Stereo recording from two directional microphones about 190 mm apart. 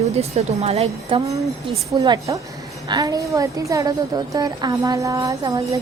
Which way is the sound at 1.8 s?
20° right (ahead or behind).